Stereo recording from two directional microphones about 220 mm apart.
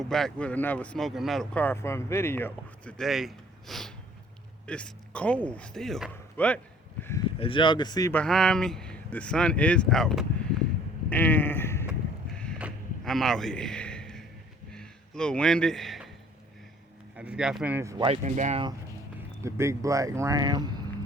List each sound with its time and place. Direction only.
0.0 s speech: centre (ahead or behind)
7.3 s speech: 25° left (ahead or behind)
8.1 s speech: 5° left (ahead or behind)
11.9 s vehicle: 5° left (ahead or behind)
14.7 s a sound: 5° left (ahead or behind)
17.2 s speech: 5° right (ahead or behind); by 18.6 s 35° right (ahead or behind)
19.4 s speech: 15° right (ahead or behind)